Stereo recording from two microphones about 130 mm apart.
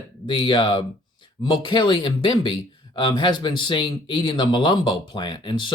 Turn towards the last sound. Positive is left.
turn(degrees=35)  # may be behind; listen again after turning